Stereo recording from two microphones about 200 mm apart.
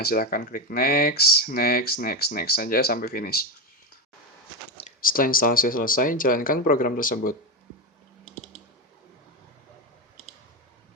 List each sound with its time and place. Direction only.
0.0 s speech: 50° left (ahead or behind)
4.9 s speech: 45° left (ahead or behind)